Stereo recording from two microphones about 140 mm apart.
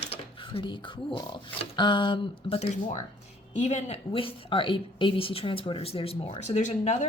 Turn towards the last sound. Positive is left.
turn(degrees=60)  # may be behind; listen again after turning